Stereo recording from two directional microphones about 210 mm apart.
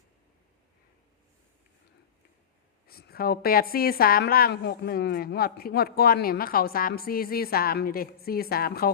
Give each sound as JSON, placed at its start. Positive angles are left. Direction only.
{"t": 2.8, "sound": "a woman's voice", "side_deg": 45}